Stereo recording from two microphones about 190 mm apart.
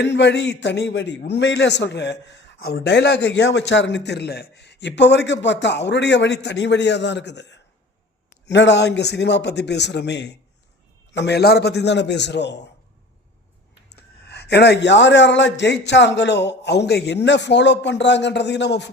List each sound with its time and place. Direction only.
0.0 s a man's voice: 65° left (ahead or behind)
13.9 s a man's voice: 60° left (ahead or behind)